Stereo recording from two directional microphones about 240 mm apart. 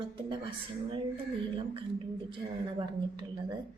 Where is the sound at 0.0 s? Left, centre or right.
Right.